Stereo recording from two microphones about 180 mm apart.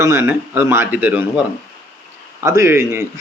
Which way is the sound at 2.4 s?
15° right (ahead or behind).